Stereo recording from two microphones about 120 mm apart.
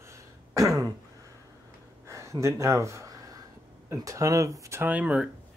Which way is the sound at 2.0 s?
25° right (ahead or behind).